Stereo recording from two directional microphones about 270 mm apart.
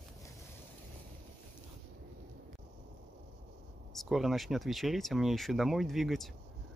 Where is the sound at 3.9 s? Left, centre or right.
Centre.